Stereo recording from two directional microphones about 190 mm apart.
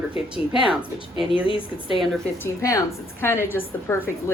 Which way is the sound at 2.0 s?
5° left (ahead or behind).